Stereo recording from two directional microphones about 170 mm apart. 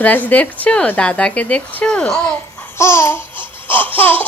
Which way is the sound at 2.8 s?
15° left (ahead or behind).